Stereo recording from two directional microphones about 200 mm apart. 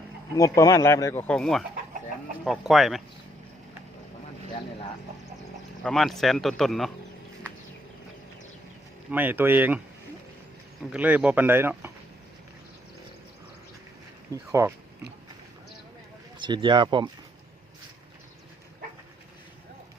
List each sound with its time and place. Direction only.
0.3 s speech: 15° left (ahead or behind)
1.3 s speech: 5° left (ahead or behind)
5.8 s speech: centre (ahead or behind)
9.0 s speech: 10° right (ahead or behind)
10.9 s speech: 5° right (ahead or behind)
14.3 s speech: 15° right (ahead or behind)
16.4 s speech: 20° right (ahead or behind)